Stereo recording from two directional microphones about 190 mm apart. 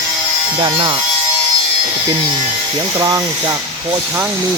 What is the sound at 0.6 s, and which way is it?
Speech, 20° right (ahead or behind).